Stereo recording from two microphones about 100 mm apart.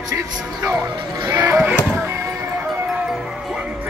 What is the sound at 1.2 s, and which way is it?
Speech, 40° right (ahead or behind).